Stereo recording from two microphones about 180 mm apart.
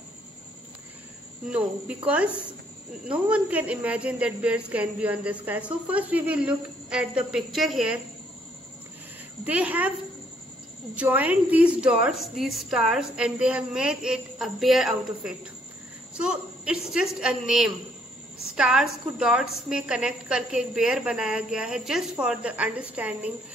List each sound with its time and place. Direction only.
1.5 s a woman's voice: 5° right (ahead or behind)
9.5 s a woman's voice: 10° right (ahead or behind)
11.0 s a woman's voice: 10° right (ahead or behind)